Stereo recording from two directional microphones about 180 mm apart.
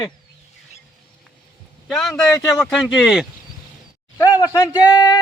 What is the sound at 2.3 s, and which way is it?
Speech, 20° left (ahead or behind).